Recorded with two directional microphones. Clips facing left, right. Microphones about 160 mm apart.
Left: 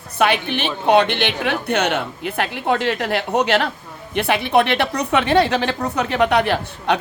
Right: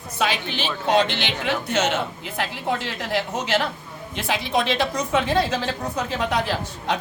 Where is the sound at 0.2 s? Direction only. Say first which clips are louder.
Left 6 dB; 60° left (ahead or behind).